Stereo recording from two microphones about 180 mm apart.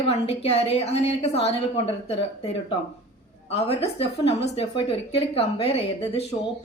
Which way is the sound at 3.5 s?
35° left (ahead or behind).